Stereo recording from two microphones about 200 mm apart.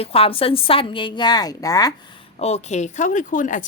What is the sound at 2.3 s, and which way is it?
Speech, 35° left (ahead or behind).